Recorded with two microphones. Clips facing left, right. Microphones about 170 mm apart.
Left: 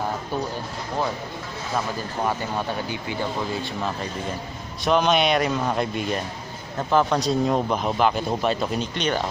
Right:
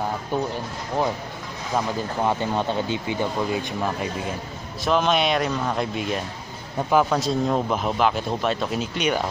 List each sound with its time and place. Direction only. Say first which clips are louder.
1.8 s speech: right 3 dB; 20° right (ahead or behind)
4.8 s speech: left 1 dB; centre (ahead or behind)